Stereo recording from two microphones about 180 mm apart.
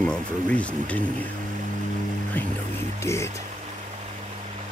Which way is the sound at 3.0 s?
15° left (ahead or behind).